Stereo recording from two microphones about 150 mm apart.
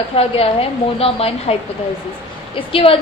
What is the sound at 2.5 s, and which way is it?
Speech, 35° left (ahead or behind).